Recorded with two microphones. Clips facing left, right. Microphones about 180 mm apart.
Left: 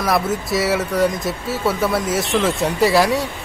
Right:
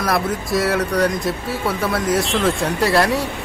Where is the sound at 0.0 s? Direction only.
Centre (ahead or behind).